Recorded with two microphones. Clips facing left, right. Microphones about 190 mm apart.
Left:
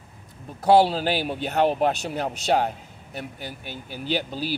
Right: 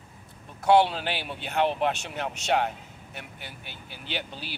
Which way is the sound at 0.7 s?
35° left (ahead or behind).